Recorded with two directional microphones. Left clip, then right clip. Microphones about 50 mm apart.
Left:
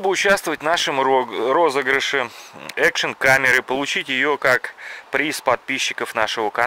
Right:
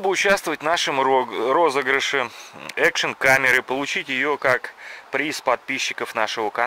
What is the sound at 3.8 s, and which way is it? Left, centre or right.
Speech, left.